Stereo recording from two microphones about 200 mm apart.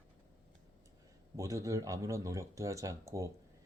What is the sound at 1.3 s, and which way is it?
Speech, 15° right (ahead or behind).